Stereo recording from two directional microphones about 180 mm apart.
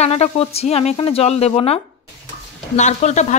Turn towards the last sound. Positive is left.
turn(degrees=40)  # may be behind; listen again after turning